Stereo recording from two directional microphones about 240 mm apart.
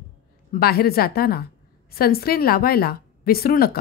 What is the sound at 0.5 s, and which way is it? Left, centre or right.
A woman's voice, left.